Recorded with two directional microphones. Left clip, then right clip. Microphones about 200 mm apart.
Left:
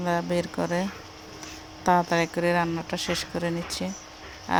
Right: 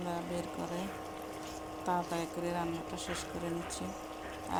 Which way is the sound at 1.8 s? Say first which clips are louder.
Left 13 dB; 35° left (ahead or behind).